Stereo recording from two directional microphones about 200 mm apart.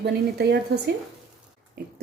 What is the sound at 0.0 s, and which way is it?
Speech, 55° right (ahead or behind).